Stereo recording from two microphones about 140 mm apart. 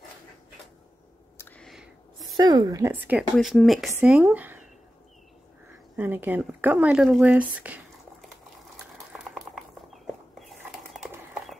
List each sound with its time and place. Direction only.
1.6 s a sound: centre (ahead or behind)
2.3 s speech: 30° right (ahead or behind); by 3.3 s 10° right (ahead or behind)
3.3 s speech: centre (ahead or behind)
5.9 s speech: 15° right (ahead or behind)
10.4 s bird: centre (ahead or behind)